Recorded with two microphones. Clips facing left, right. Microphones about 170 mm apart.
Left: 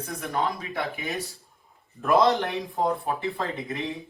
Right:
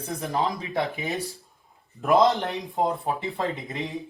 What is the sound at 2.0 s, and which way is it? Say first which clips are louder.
Speech: right 1 dB; 20° right (ahead or behind).